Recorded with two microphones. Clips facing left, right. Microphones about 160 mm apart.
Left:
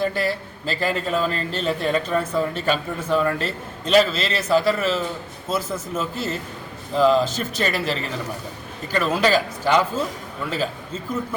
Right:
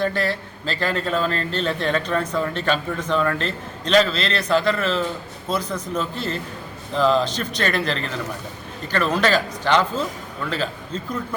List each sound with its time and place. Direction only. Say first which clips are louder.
0.0 s a man's voice: even; 5° left (ahead or behind)